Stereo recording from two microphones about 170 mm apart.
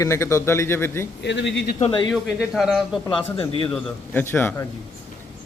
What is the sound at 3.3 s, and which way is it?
Speech, 30° left (ahead or behind).